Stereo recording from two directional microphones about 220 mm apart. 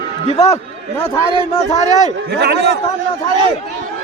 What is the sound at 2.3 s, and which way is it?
Speech, 50° right (ahead or behind).